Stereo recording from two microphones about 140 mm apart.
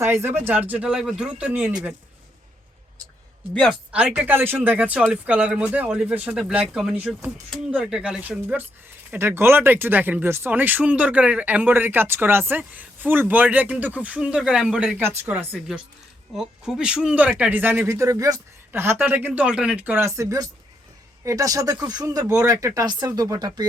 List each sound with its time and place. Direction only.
0.0 s speech: 20° right (ahead or behind)
3.5 s speech: 5° left (ahead or behind)
3.9 s speech: 10° right (ahead or behind)
15.5 s speech: 5° right (ahead or behind); by 23.6 s 30° right (ahead or behind)